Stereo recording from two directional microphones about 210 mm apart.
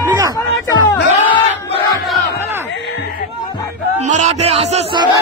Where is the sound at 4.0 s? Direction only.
35° right (ahead or behind).